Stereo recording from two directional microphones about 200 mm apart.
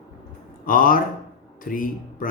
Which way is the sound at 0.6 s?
45° left (ahead or behind).